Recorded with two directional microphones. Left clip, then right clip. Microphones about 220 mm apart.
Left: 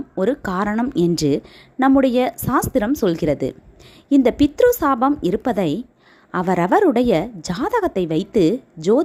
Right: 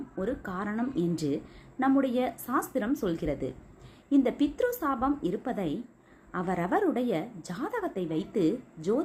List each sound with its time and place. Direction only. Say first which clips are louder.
0.2 s a woman's voice: left 13 dB; 45° left (ahead or behind)